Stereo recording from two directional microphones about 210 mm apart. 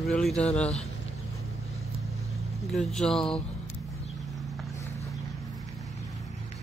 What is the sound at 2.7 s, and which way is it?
Speech, centre (ahead or behind).